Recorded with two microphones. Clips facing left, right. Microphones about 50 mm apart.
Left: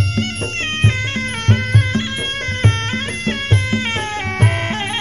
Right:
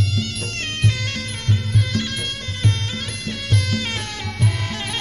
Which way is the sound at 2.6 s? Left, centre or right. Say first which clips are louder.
Left 3 dB; left.